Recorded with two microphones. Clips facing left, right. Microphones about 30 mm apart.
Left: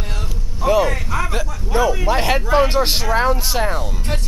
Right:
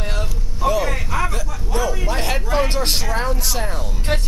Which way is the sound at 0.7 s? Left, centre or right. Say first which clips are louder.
Left 4 dB; centre.